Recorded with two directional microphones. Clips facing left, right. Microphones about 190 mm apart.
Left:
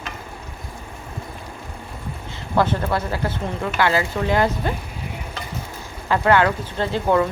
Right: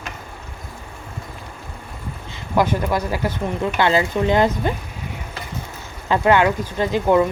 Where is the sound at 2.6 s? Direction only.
15° right (ahead or behind).